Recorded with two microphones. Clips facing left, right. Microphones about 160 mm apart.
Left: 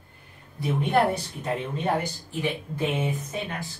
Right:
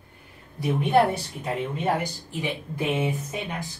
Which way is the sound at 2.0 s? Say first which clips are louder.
Left 1 dB; 15° right (ahead or behind).